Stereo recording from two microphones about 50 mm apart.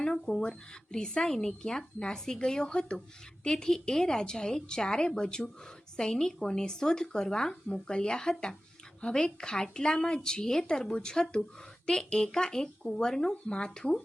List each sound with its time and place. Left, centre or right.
0.0 s speech: centre